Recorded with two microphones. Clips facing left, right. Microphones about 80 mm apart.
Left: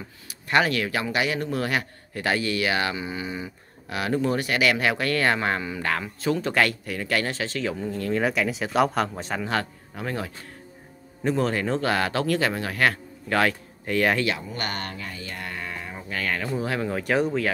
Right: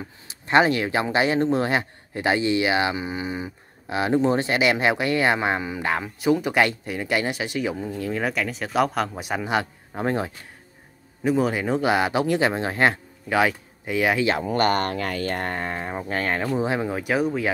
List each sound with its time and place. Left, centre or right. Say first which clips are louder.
0.3 s speech: right 4 dB; right; by 9.2 s centre
9.2 s speech: right 2 dB; centre
9.9 s speech: right 6 dB; right
11.2 s speech: right 2 dB; centre
13.3 s speech: right 2 dB; centre
14.5 s speech: right 10 dB; right
16.5 s speech: right 3 dB; right
16.9 s speech: even; centre